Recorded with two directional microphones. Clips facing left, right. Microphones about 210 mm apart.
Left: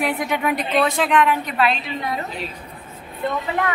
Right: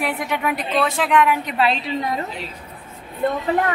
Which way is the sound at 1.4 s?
25° right (ahead or behind).